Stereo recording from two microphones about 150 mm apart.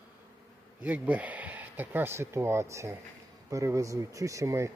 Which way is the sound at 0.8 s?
10° right (ahead or behind).